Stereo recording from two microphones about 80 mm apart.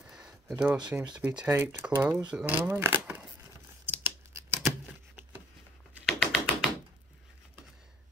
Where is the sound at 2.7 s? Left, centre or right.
Right.